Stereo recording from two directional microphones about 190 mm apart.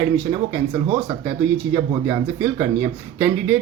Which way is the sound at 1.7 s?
20° right (ahead or behind).